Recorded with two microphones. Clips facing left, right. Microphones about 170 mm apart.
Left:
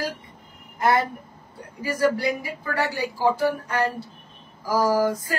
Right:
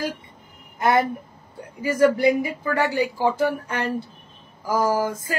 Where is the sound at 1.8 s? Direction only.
25° right (ahead or behind).